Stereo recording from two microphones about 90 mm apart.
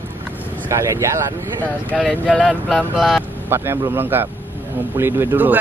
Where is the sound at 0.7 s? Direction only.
35° right (ahead or behind).